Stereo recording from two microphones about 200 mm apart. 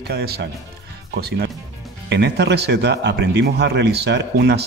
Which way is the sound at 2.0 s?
55° right (ahead or behind).